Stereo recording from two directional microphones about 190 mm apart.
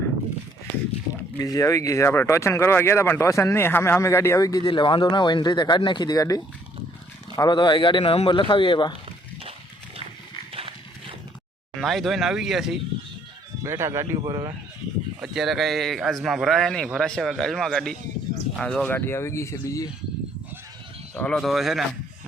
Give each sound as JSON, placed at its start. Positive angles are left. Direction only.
{"t": 1.4, "sound": "speech", "side_deg": 15}
{"t": 11.8, "sound": "a man's voice", "side_deg": 0}
{"t": 13.7, "sound": "speech", "side_deg": -15}
{"t": 15.2, "sound": "a man's voice", "side_deg": 0}
{"t": 21.2, "sound": "a man's voice", "side_deg": 5}